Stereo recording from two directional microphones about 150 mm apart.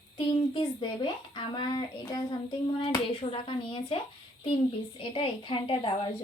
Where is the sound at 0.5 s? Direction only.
30° left (ahead or behind).